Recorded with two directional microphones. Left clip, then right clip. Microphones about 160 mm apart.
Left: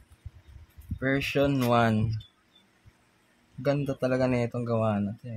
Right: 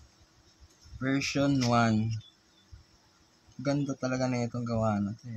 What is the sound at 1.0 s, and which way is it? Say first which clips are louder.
Speech: left 4 dB; 45° left (ahead or behind).